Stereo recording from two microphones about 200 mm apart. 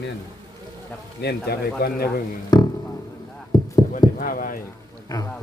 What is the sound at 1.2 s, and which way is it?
Speech, 55° left (ahead or behind).